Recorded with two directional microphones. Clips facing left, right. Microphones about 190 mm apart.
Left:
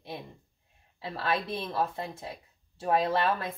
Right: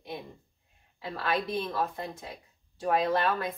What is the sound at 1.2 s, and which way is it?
Speech, 25° left (ahead or behind).